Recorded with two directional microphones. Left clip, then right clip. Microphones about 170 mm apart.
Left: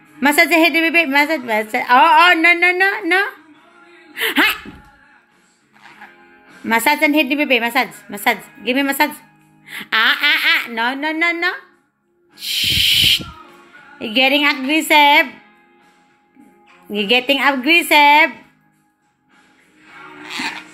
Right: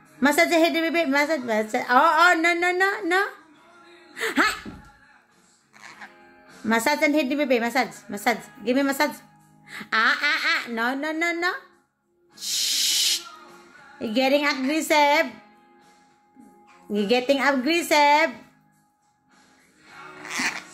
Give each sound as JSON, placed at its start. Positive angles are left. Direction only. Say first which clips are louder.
{"t": 0.2, "sound": "a woman's voice", "louder": "left 6 dB", "side_deg": -5}
{"t": 4.1, "sound": "speech", "louder": "left 7 dB", "side_deg": -5}
{"t": 5.8, "sound": "music", "louder": "left 2 dB", "side_deg": -20}
{"t": 6.6, "sound": "a woman's voice", "louder": "left 7 dB", "side_deg": -5}
{"t": 12.4, "sound": "snake", "louder": "left 8 dB", "side_deg": -10}
{"t": 13.9, "sound": "a woman's voice", "louder": "left 7 dB", "side_deg": -10}
{"t": 16.9, "sound": "a woman's voice", "louder": "left 6 dB", "side_deg": -10}